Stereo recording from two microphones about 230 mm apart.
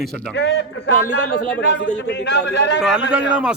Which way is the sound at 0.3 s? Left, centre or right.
Left.